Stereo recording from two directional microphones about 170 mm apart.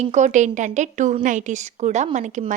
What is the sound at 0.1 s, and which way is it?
A woman's voice, 45° right (ahead or behind).